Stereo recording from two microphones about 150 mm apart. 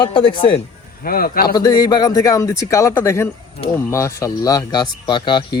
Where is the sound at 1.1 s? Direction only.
80° left.